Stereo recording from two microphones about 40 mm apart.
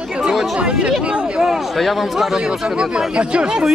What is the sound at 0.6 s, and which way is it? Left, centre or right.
Speech, right.